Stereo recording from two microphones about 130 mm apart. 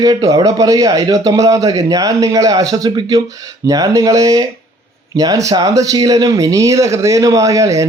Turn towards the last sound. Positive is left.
turn(degrees=-25)  # may be behind; listen again after turning